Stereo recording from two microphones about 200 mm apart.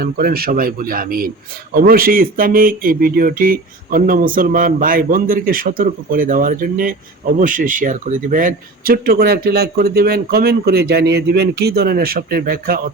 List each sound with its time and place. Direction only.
0.0 s speech: 50° right (ahead or behind)